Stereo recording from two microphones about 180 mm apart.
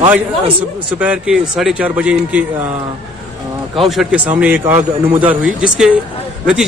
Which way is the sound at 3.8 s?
5° right (ahead or behind).